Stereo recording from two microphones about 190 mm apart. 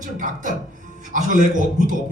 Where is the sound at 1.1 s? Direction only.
45° right (ahead or behind).